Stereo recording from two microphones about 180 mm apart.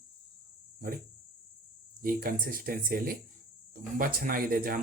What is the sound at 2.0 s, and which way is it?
Speech, 50° right (ahead or behind).